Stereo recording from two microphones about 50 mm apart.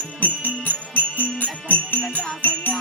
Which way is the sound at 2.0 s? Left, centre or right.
Left.